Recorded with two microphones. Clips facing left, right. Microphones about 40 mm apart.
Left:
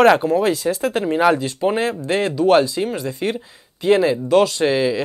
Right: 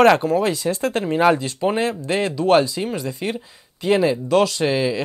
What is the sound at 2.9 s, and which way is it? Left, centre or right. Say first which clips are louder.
Speech: left 2 dB; left.